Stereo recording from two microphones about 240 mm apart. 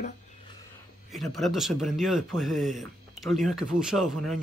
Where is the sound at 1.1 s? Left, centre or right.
Centre.